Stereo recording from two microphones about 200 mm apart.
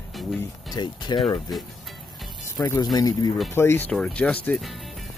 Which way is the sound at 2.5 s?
15° left (ahead or behind).